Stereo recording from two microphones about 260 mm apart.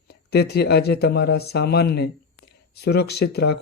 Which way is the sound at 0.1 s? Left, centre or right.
Left.